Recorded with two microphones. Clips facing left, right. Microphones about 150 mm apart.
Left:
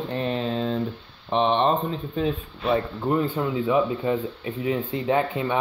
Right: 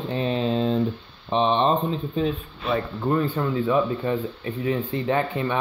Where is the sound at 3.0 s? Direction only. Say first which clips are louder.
Even; 15° left (ahead or behind).